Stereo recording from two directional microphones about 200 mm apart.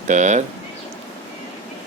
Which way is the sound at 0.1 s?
35° right (ahead or behind).